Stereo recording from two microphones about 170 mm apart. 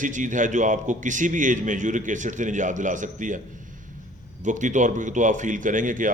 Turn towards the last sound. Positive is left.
turn(degrees=-50)  # may be behind; listen again after turning